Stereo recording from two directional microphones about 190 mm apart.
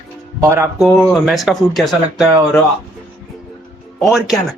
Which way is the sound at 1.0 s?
Centre (ahead or behind).